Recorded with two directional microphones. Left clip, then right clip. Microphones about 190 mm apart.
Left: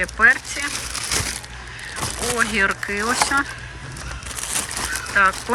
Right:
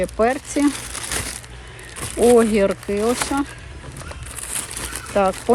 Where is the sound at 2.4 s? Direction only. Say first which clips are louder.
Right 1 dB; 25° right (ahead or behind).